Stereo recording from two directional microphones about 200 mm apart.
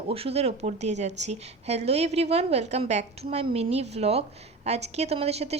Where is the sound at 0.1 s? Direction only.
30° right (ahead or behind).